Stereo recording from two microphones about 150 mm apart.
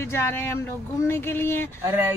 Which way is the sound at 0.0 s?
15° left (ahead or behind).